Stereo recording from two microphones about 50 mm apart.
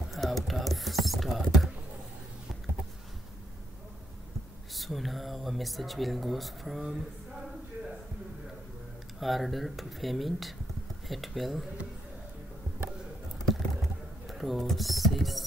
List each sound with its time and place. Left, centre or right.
0.1 s a sound: centre
4.7 s speech: centre
9.2 s speech: centre
13.5 s typing: centre